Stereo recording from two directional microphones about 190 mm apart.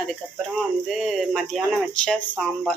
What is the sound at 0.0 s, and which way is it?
A woman's voice, centre (ahead or behind).